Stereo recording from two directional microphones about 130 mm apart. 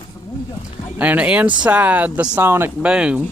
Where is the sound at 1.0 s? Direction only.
10° right (ahead or behind).